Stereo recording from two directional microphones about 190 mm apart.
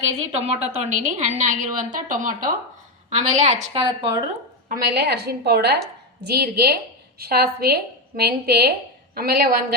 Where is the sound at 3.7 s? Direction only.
25° right (ahead or behind).